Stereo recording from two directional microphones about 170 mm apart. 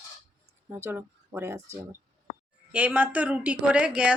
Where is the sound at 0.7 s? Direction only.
15° right (ahead or behind).